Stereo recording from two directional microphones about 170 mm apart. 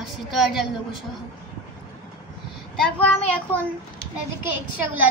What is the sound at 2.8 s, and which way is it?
Speech, 10° left (ahead or behind).